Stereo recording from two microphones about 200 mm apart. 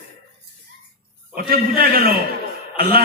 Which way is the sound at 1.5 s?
50° right (ahead or behind).